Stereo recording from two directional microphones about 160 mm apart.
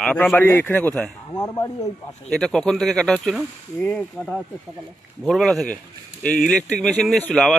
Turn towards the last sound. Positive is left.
turn(degrees=5)  # may be behind; listen again after turning